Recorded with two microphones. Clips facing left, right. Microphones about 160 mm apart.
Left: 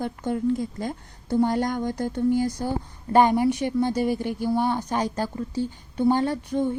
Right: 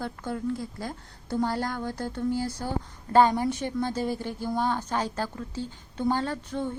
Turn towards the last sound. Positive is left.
turn(degrees=15)  # may be behind; listen again after turning